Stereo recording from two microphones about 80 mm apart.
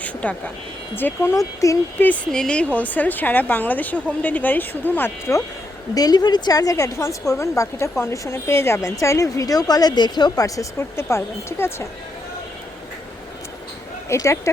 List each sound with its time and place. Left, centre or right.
0.0 s a woman's voice: centre
1.3 s a woman's voice: left
2.0 s a woman's voice: centre
5.9 s a woman's voice: left
10.4 s a woman's voice: left
10.8 s a woman's voice: left
14.1 s a woman's voice: left